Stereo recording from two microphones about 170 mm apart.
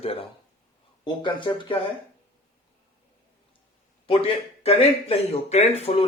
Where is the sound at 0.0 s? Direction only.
35° left (ahead or behind).